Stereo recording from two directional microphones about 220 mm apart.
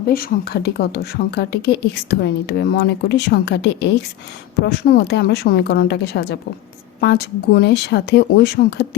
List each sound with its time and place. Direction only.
0.1 s a woman's voice: 45° left (ahead or behind)